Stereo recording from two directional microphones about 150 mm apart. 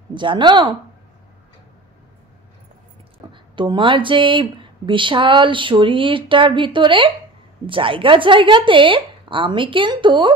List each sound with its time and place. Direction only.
0.1 s speech: 30° right (ahead or behind)
3.5 s speech: 35° right (ahead or behind)